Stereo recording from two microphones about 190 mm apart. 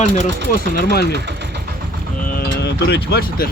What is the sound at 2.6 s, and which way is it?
Speech, 60° left (ahead or behind).